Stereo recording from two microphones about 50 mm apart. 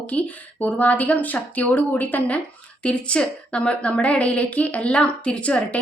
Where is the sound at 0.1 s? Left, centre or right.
Left.